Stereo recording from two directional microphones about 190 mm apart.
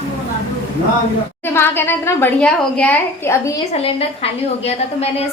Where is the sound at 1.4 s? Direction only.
10° left (ahead or behind).